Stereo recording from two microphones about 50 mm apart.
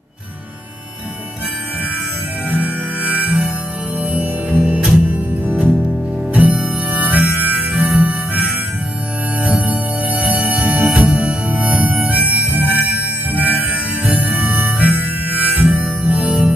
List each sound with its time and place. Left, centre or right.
2.5 s music: right
4.7 s music: right
5.1 s music: right
6.3 s harmonica: right
9.4 s music: right